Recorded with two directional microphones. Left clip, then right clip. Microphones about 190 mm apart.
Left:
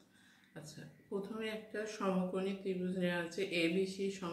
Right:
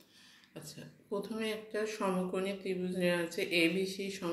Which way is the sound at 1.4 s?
15° right (ahead or behind).